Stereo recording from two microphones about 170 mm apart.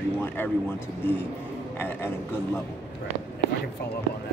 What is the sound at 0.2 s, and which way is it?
Speech, 10° left (ahead or behind).